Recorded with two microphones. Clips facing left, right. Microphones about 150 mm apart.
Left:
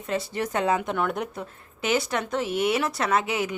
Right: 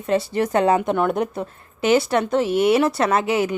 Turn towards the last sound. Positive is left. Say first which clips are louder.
# right 5 dB
turn(degrees=-35)  # may be behind; listen again after turning